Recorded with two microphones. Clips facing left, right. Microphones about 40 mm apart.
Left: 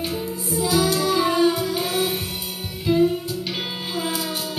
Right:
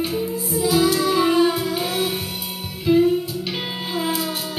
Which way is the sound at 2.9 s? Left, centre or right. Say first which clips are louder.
Right 3 dB; centre.